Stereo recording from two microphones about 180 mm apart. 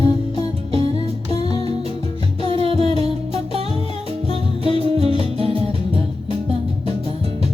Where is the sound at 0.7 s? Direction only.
30° right (ahead or behind).